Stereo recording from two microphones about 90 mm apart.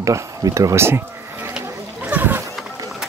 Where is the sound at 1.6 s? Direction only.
20° right (ahead or behind).